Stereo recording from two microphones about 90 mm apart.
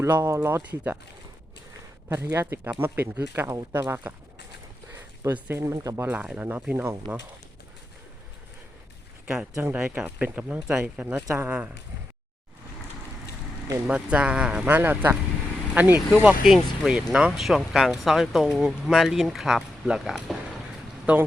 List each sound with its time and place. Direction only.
0.0 s speech: 30° right (ahead or behind)
2.1 s speech: 30° right (ahead or behind)
4.9 s a sound: 25° right (ahead or behind)
5.6 s speech: 35° right (ahead or behind)
6.0 s speech: 15° right (ahead or behind)
9.2 s speech: 15° right (ahead or behind)
13.8 s speech: 15° right (ahead or behind)
14.7 s speech: 20° right (ahead or behind)
16.5 s speech: 5° right (ahead or behind)